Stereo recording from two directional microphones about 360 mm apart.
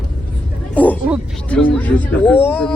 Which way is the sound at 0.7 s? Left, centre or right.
Centre.